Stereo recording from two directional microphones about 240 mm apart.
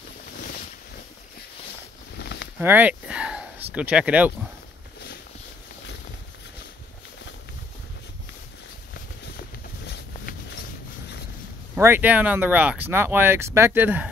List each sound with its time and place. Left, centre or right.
2.1 s a sound: left
2.6 s speech: centre
11.7 s speech: centre